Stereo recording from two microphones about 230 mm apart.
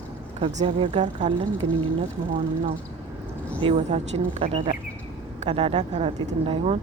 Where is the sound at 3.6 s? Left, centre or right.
Right.